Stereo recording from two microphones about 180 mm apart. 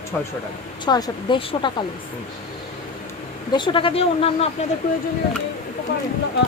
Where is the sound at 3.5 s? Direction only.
25° left (ahead or behind).